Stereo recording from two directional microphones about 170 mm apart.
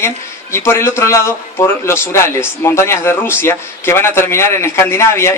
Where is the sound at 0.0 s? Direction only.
15° left (ahead or behind).